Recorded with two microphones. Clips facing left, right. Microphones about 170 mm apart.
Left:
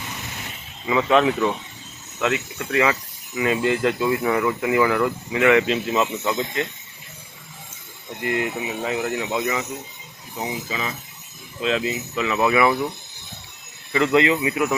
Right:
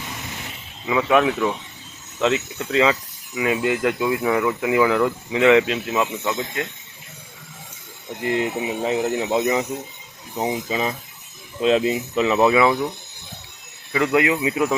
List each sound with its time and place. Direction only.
0.9 s speech: 5° right (ahead or behind)
2.1 s speech: 20° right (ahead or behind)
5.6 s speech: 5° right (ahead or behind)
8.4 s speech: 25° right (ahead or behind)
13.9 s speech: 10° right (ahead or behind)
14.5 s speech: 25° right (ahead or behind)